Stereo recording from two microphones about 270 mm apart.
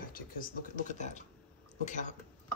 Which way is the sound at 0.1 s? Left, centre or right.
Left.